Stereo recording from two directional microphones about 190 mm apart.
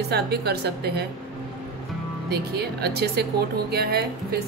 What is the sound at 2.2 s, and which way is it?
Speech, 60° right (ahead or behind).